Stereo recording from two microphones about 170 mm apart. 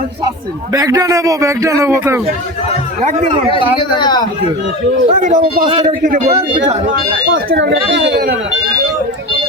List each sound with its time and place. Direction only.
0.7 s a man's voice: 20° right (ahead or behind)
3.0 s a man's voice: 45° right (ahead or behind)
3.8 s speech: 25° left (ahead or behind)
5.0 s a man's voice: 50° right (ahead or behind)
5.4 s a man's voice: 30° right (ahead or behind)
7.5 s a child's voice: 90° right